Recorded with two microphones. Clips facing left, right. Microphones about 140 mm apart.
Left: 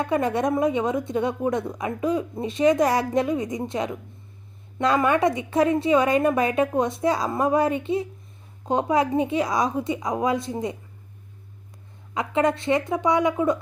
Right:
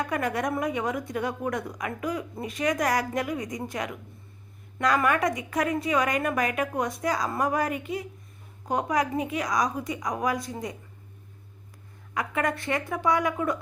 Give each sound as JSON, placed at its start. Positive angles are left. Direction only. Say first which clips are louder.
{"t": 0.0, "sound": "a woman's voice", "louder": "left 5 dB", "side_deg": 25}
{"t": 12.1, "sound": "a woman's voice", "louder": "left 6 dB", "side_deg": 25}